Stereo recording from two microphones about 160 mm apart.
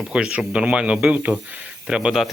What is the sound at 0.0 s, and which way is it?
A man's voice, 5° right (ahead or behind).